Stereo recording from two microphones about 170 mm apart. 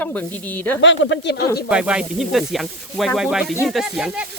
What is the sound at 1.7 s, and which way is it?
Speech, 5° right (ahead or behind).